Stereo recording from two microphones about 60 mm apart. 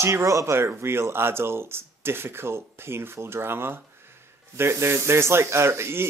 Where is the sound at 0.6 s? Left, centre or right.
Right.